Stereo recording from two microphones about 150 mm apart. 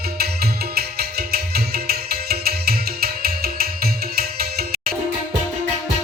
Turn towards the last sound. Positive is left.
turn(degrees=-85)